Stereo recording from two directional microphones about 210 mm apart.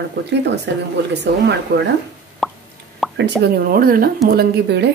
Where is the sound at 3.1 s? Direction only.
55° right (ahead or behind).